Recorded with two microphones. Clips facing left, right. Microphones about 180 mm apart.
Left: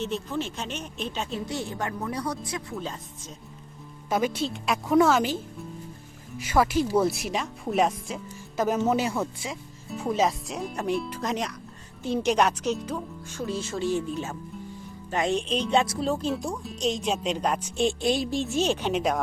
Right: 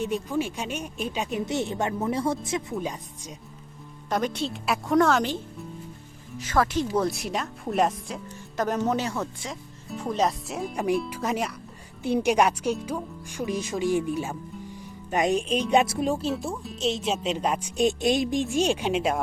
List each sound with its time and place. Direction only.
0.0 s speech: 10° right (ahead or behind)
4.1 s speech: 5° left (ahead or behind)
6.4 s speech: 10° left (ahead or behind); by 19.2 s 10° right (ahead or behind)